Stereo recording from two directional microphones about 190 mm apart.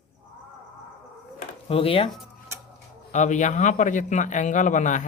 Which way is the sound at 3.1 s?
40° left (ahead or behind).